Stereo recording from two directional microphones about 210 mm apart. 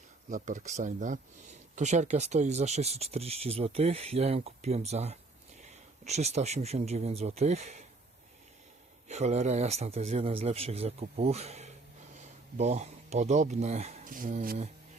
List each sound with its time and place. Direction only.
0.3 s speech: 40° right (ahead or behind)
9.0 s speech: 30° right (ahead or behind)